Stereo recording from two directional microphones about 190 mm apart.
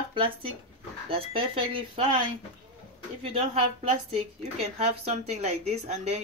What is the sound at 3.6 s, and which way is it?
Speech, 30° right (ahead or behind).